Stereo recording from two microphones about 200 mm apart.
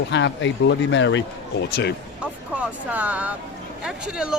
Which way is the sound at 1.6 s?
55° left (ahead or behind).